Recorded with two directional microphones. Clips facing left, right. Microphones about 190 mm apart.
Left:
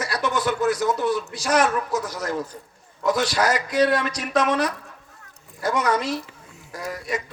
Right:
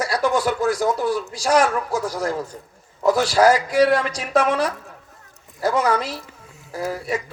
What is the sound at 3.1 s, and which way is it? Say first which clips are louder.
Speech: right 6 dB; 30° right (ahead or behind).